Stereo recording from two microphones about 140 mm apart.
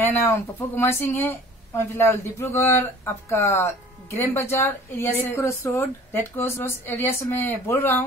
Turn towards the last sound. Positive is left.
turn(degrees=15)  # may be behind; listen again after turning